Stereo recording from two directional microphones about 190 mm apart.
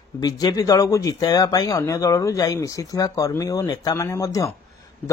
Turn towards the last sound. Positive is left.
turn(degrees=15)  # may be behind; listen again after turning